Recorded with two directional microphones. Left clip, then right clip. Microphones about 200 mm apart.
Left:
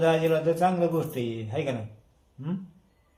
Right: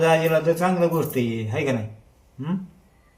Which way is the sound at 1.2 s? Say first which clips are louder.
Right 6 dB; 5° left (ahead or behind).